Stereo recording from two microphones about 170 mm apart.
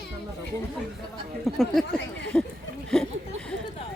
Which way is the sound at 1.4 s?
Centre (ahead or behind).